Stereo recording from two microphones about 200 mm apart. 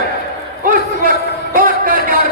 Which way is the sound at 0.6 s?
45° right (ahead or behind).